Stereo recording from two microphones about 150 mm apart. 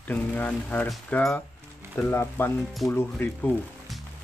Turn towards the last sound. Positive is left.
turn(degrees=10)  # may be behind; listen again after turning